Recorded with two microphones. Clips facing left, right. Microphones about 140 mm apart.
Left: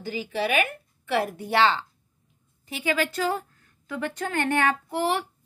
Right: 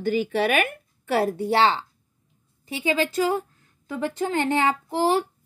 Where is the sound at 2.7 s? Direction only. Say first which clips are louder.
Right 3 dB; 25° right (ahead or behind).